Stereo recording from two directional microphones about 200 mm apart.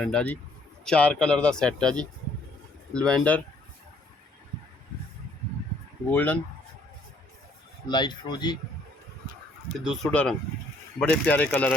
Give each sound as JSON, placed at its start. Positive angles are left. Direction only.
{"t": 0.0, "sound": "speech", "side_deg": 5}
{"t": 6.1, "sound": "speech", "side_deg": 10}
{"t": 7.9, "sound": "speech", "side_deg": 20}
{"t": 9.8, "sound": "speech", "side_deg": 0}